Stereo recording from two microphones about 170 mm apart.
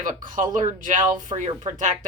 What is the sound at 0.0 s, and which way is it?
Speech, 50° right (ahead or behind).